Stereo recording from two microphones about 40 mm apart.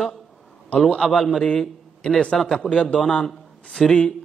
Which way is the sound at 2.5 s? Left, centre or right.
Left.